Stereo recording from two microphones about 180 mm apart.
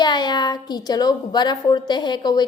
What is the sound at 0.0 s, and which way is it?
A woman's voice, 25° left (ahead or behind).